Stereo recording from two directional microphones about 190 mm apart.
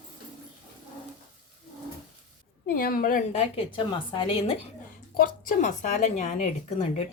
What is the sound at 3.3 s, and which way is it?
Speech, 30° left (ahead or behind).